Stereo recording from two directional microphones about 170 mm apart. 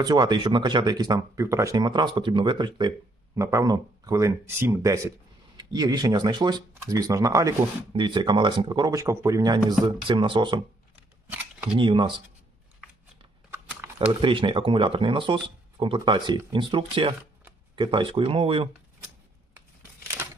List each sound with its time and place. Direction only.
0.0 s speech: 25° right (ahead or behind)
11.8 s speech: 30° right (ahead or behind)
14.1 s speech: 30° right (ahead or behind)